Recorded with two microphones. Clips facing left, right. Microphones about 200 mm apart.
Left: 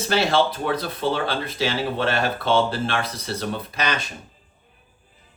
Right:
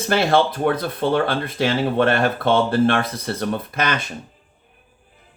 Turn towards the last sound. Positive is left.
turn(degrees=-55)  # may be behind; listen again after turning